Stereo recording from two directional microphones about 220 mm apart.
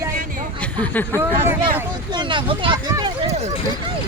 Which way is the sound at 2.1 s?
20° right (ahead or behind).